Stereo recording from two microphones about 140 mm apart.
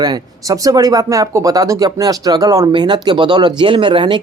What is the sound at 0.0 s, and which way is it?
Speech, 25° right (ahead or behind).